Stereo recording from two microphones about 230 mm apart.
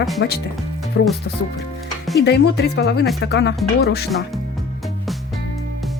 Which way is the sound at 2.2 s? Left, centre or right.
Left.